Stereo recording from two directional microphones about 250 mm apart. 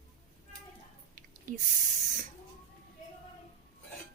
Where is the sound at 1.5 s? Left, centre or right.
Right.